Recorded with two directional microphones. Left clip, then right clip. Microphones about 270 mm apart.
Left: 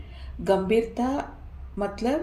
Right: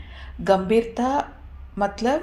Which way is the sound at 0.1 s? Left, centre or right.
Right.